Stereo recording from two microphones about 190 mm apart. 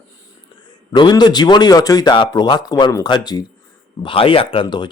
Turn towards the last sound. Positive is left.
turn(degrees=25)  # may be behind; listen again after turning